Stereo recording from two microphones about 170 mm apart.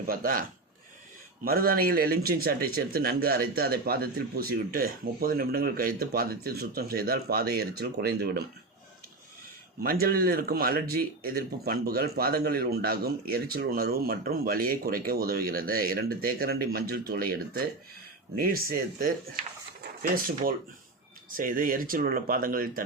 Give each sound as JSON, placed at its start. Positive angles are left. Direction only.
{"t": 0.1, "sound": "speech", "side_deg": -55}
{"t": 1.5, "sound": "speech", "side_deg": -60}
{"t": 9.8, "sound": "speech", "side_deg": -60}